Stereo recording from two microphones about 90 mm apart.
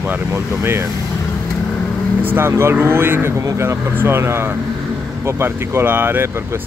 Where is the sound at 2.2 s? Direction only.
25° right (ahead or behind).